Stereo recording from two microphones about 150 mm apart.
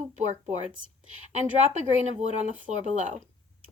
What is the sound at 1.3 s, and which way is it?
Speech, 50° right (ahead or behind).